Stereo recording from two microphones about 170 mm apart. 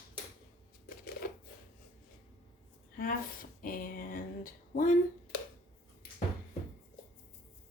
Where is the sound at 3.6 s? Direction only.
55° left (ahead or behind).